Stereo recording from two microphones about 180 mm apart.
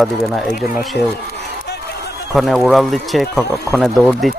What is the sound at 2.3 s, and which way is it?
Speech, centre (ahead or behind).